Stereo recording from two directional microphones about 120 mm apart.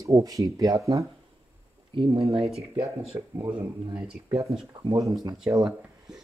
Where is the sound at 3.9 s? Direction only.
10° right (ahead or behind).